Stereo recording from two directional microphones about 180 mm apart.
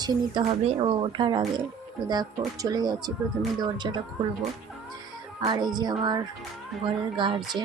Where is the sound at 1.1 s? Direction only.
25° right (ahead or behind).